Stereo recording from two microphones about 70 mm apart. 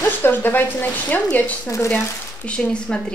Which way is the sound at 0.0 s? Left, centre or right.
Left.